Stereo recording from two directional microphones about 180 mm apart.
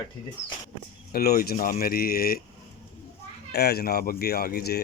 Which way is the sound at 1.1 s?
55° left (ahead or behind).